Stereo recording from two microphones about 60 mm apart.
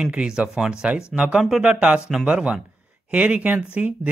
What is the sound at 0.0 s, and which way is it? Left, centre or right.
Speech, centre.